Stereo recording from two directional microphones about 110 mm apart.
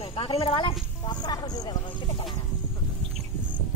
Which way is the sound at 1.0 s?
40° left (ahead or behind).